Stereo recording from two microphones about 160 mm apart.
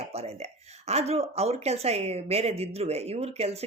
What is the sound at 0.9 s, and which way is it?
Speech, 40° right (ahead or behind).